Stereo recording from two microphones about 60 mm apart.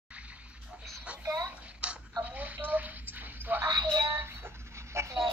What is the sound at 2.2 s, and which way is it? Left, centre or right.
Bathtub, right.